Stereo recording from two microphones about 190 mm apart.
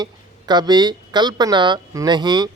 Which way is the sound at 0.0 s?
20° right (ahead or behind).